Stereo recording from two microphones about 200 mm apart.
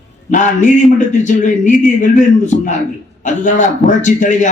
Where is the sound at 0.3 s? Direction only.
40° left (ahead or behind).